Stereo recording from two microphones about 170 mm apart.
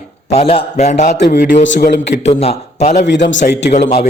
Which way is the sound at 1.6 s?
85° left.